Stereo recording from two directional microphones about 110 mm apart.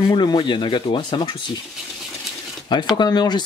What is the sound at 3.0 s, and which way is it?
Speech, 40° left (ahead or behind).